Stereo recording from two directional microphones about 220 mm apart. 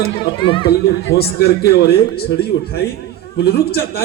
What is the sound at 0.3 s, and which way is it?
Speech, 20° left (ahead or behind).